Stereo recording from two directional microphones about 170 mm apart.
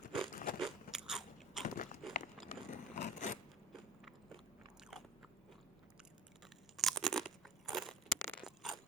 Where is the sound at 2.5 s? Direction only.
45° left (ahead or behind).